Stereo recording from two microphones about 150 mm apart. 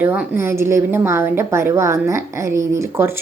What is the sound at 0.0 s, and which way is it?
A woman's voice, 15° right (ahead or behind).